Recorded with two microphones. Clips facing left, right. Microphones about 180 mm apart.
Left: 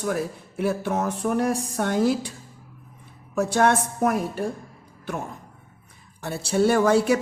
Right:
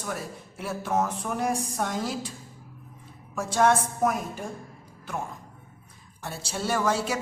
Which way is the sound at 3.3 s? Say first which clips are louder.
Left 2 dB; 65° left (ahead or behind).